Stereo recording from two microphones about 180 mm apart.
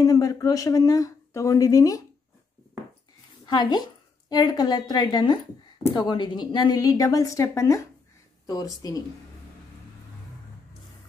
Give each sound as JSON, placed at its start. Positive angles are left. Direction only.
{"t": 0.0, "sound": "speech", "side_deg": 20}
{"t": 3.4, "sound": "a woman's voice", "side_deg": 25}